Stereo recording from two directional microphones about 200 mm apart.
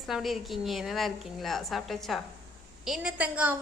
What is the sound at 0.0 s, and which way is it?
A woman's voice, centre (ahead or behind).